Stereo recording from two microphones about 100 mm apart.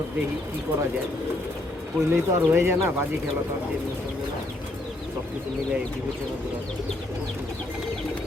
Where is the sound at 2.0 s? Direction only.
20° right (ahead or behind).